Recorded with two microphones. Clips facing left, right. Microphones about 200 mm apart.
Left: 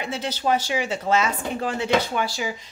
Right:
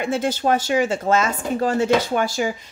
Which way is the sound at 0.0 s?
50° right (ahead or behind).